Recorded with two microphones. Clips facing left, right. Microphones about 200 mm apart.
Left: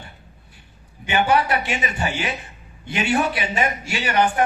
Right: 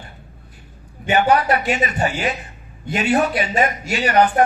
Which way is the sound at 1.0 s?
40° right (ahead or behind).